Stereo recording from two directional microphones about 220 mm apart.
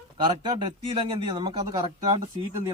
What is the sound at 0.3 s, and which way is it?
A man's voice, 20° right (ahead or behind).